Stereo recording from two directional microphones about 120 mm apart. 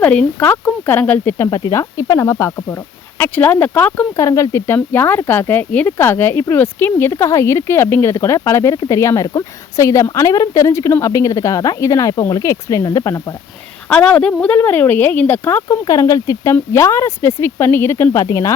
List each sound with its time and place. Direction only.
0.0 s speech: 10° left (ahead or behind)
1.5 s speech: 30° left (ahead or behind); by 4.0 s 15° left (ahead or behind)
4.2 s speech: 25° left (ahead or behind)
13.9 s speech: 10° left (ahead or behind); by 18.5 s 30° left (ahead or behind)